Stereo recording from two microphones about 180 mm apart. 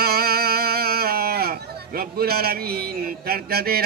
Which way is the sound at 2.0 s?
60° right (ahead or behind).